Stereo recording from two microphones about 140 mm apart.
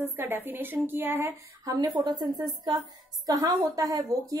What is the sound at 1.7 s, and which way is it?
A woman's voice, 30° right (ahead or behind).